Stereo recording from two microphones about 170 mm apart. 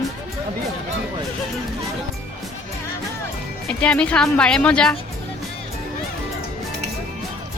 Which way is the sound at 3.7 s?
5° left (ahead or behind).